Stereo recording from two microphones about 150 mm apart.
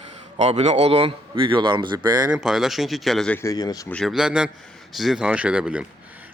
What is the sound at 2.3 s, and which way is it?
Speech, 5° right (ahead or behind).